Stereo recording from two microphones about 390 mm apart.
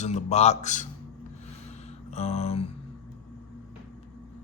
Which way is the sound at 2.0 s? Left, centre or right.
Centre.